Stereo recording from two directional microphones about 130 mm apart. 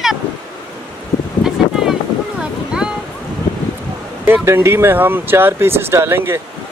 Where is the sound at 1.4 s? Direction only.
5° right (ahead or behind).